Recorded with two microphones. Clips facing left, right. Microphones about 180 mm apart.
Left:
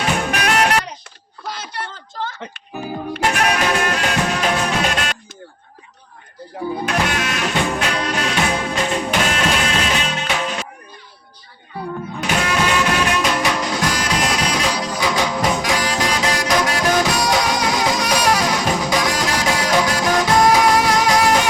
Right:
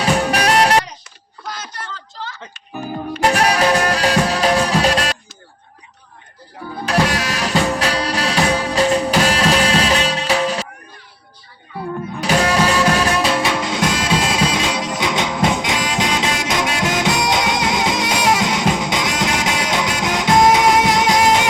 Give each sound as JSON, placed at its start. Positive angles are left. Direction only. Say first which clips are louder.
{"t": 0.0, "sound": "music", "louder": "right 3 dB", "side_deg": -35}
{"t": 1.7, "sound": "a sound", "louder": "left 3 dB", "side_deg": 55}
{"t": 2.7, "sound": "music", "louder": "right 1 dB", "side_deg": 5}
{"t": 3.2, "sound": "music", "louder": "right 4 dB", "side_deg": -35}
{"t": 6.8, "sound": "music", "louder": "right 5 dB", "side_deg": -35}
{"t": 12.2, "sound": "music", "louder": "right 4 dB", "side_deg": -35}